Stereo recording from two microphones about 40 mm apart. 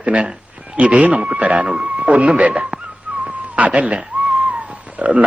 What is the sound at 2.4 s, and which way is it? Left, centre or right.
Speech, right.